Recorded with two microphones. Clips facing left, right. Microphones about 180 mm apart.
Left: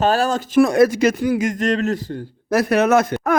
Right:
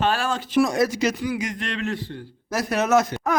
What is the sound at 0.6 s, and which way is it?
Speech, 60° left (ahead or behind).